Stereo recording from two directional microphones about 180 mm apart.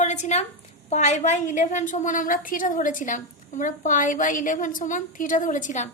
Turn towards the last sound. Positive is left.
turn(degrees=45)  # may be behind; listen again after turning